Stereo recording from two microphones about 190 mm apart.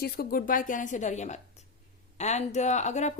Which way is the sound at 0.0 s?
50° left (ahead or behind).